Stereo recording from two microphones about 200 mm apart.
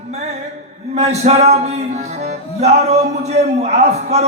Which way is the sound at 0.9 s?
35° right (ahead or behind).